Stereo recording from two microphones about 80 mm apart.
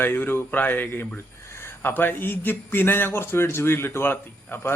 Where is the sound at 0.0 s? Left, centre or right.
Left.